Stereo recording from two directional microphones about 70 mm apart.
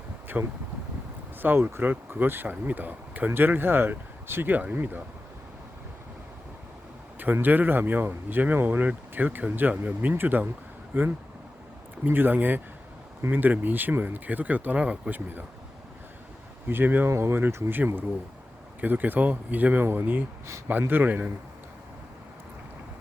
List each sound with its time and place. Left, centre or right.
0.4 s speech: right
7.3 s speech: right
16.6 s speech: right
17.1 s speech: right